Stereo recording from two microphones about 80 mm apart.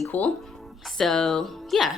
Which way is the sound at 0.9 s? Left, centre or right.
Centre.